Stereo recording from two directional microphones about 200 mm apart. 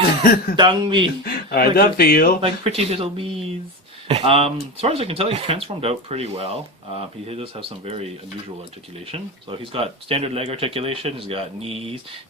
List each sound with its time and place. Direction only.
0.0 s speech: 50° left (ahead or behind)
0.5 s speech: 25° right (ahead or behind)
1.2 s speech: 50° left (ahead or behind)
2.4 s speech: 30° right (ahead or behind)